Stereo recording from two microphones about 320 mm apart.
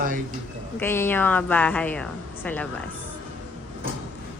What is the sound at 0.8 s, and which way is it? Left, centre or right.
A woman's voice, centre.